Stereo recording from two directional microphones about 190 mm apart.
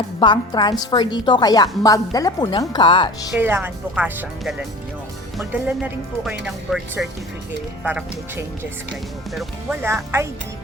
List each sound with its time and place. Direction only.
0.2 s a woman's voice: 25° left (ahead or behind)
3.3 s speech: 10° right (ahead or behind)
9.3 s speech: centre (ahead or behind)
9.8 s speech: 15° right (ahead or behind)